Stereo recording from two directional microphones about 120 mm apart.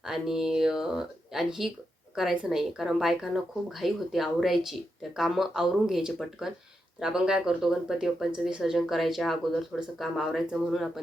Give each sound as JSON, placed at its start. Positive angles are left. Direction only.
{"t": 0.0, "sound": "speech", "side_deg": -5}